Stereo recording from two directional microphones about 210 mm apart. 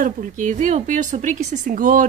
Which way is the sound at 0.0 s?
40° right (ahead or behind).